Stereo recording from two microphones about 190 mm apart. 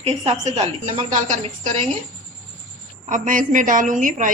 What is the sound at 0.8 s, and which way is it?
Speech, 25° right (ahead or behind).